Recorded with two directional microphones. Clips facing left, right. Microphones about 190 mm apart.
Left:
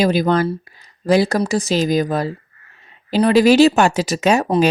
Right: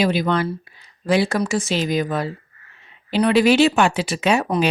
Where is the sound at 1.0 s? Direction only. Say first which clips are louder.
Left 3 dB; 40° left (ahead or behind).